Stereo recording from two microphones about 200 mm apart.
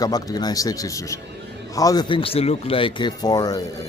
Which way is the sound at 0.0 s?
20° left (ahead or behind).